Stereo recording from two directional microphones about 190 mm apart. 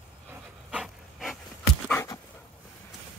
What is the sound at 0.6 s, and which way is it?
Dog, centre (ahead or behind).